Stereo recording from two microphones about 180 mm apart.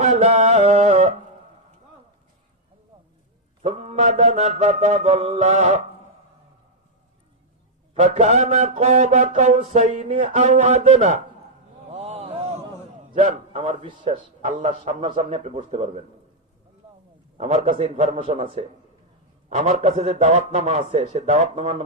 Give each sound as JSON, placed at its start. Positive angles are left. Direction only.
{"t": 0.0, "sound": "music", "side_deg": -40}
{"t": 3.6, "sound": "a man's voice", "side_deg": -35}
{"t": 7.9, "sound": "a man's voice", "side_deg": -40}
{"t": 11.9, "sound": "a sound", "side_deg": -35}
{"t": 14.4, "sound": "a man's voice", "side_deg": -40}
{"t": 17.3, "sound": "a man's voice", "side_deg": -35}